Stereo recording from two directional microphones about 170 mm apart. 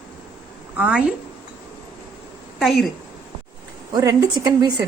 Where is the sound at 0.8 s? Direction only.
5° right (ahead or behind).